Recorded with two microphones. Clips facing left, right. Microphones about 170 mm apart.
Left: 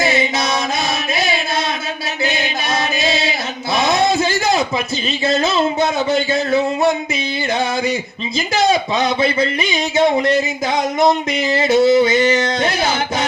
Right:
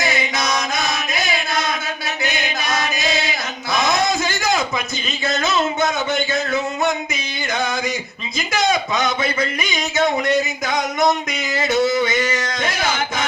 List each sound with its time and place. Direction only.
0.0 s chant: 30° left (ahead or behind)
1.1 s a sound: 30° left (ahead or behind)
2.2 s music: 30° left (ahead or behind)
3.8 s a sound: 30° left (ahead or behind)
5.2 s speech: 30° left (ahead or behind)
8.4 s speech: 30° left (ahead or behind)
11.5 s speech: 30° left (ahead or behind)